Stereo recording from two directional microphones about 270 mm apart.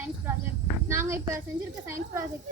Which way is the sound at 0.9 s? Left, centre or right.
Centre.